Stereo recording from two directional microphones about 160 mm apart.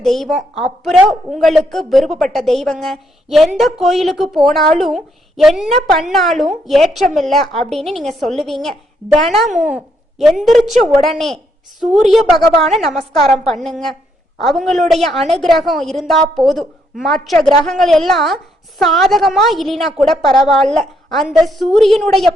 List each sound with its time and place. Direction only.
0.0 s a woman's voice: centre (ahead or behind)